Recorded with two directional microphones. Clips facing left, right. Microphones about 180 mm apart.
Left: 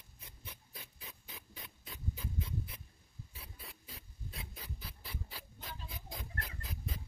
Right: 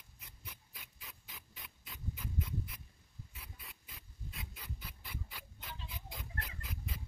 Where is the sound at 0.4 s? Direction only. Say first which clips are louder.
Left 3 dB; 30° left (ahead or behind).